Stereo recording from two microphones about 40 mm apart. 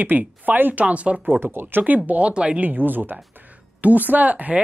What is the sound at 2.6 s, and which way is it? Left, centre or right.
Speech, right.